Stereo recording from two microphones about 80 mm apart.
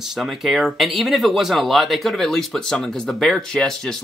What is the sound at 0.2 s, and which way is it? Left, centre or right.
Speech, centre.